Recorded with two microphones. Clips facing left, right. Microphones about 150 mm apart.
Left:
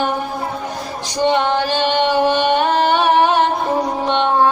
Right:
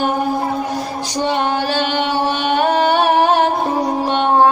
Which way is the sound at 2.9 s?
45° right (ahead or behind).